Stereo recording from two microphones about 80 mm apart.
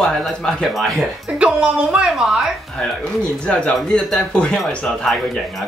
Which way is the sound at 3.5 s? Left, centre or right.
Centre.